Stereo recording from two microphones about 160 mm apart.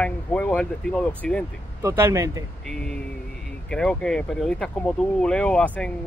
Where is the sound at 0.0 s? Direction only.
10° left (ahead or behind).